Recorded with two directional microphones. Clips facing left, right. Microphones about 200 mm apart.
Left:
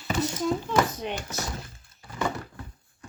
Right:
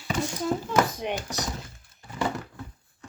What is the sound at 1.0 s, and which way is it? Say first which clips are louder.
Speech: right 2 dB; 15° right (ahead or behind).